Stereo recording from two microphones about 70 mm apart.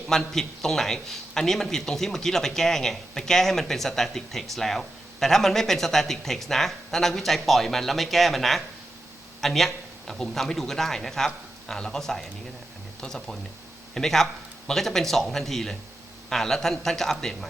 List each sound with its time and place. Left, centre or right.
0.1 s speech: centre